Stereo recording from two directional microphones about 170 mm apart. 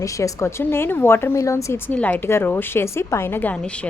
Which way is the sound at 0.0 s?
20° left (ahead or behind).